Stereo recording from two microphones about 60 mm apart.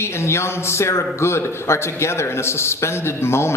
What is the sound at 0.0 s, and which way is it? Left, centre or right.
Speech, left.